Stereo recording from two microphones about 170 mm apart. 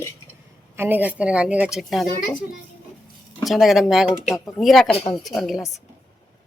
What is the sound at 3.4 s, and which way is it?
A woman's voice, centre (ahead or behind).